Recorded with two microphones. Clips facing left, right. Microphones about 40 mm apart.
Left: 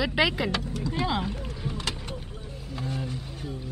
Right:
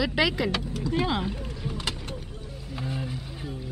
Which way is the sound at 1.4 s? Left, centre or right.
Centre.